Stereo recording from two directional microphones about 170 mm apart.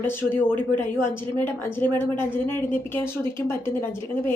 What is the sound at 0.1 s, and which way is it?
Speech, 10° left (ahead or behind).